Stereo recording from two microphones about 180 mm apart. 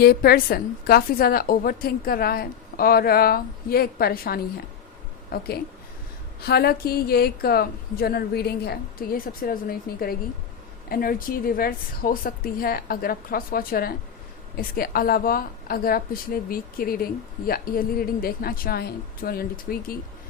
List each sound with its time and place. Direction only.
0.0 s a woman's voice: 60° left (ahead or behind)